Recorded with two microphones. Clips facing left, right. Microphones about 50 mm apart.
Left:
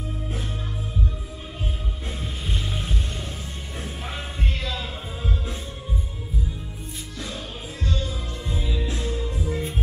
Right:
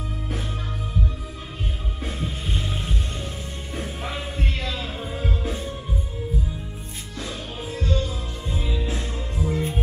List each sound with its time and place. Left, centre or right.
2.0 s music: centre
7.8 s music: right